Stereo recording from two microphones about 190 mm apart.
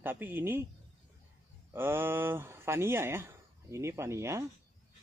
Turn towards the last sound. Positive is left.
turn(degrees=-15)  # may be behind; listen again after turning